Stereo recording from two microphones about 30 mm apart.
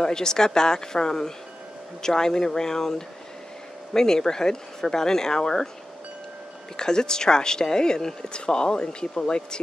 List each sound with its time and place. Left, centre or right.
0.0 s speech: left
6.8 s speech: left